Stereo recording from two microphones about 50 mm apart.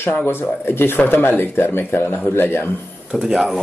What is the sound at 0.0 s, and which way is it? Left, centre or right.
A man's voice, left.